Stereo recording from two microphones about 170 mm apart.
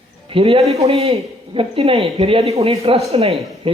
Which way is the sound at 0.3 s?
35° right (ahead or behind).